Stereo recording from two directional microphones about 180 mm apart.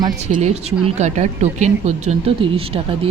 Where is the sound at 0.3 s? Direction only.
40° right (ahead or behind).